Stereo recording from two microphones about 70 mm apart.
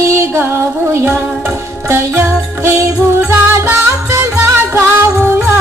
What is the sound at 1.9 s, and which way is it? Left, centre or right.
Music, right.